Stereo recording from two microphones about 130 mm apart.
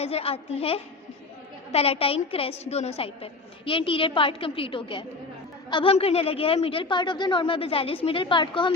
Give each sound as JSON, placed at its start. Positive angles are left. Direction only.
{"t": 0.0, "sound": "a woman's voice", "side_deg": 50}